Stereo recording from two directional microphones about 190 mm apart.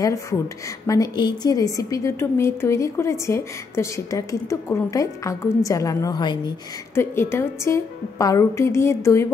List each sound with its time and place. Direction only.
0.0 s a woman's voice: 15° left (ahead or behind)
7.0 s a woman's voice: 10° left (ahead or behind)